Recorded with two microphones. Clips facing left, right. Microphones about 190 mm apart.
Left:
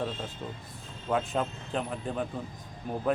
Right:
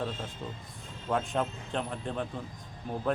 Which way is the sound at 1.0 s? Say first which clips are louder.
Left 1 dB; centre (ahead or behind).